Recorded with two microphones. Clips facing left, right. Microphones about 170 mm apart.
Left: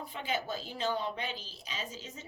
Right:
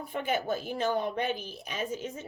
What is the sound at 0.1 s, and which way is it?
A woman's voice, 55° right (ahead or behind).